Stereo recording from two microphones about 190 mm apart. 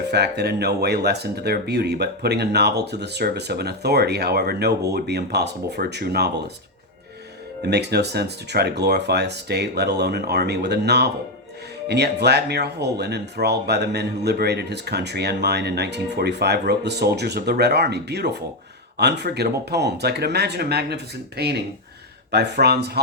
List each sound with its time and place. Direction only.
0.1 s speech: 60° right (ahead or behind)
7.6 s speech: 60° right (ahead or behind)